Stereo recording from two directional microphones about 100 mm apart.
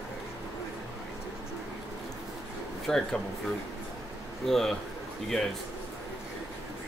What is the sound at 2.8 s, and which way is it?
Speech, 5° left (ahead or behind).